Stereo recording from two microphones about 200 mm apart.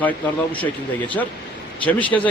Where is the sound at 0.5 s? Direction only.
25° left (ahead or behind).